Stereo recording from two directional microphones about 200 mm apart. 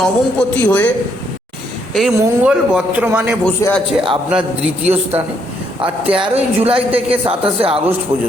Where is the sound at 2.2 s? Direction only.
5° right (ahead or behind).